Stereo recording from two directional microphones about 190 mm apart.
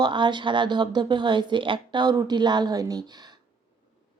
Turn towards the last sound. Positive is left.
turn(degrees=-20)  # may be behind; listen again after turning